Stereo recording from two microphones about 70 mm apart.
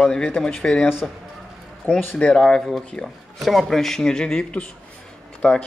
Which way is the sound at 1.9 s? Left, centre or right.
Centre.